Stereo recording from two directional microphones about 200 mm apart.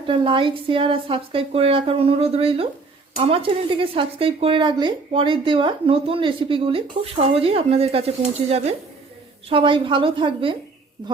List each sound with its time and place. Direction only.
0.1 s speech: 25° right (ahead or behind)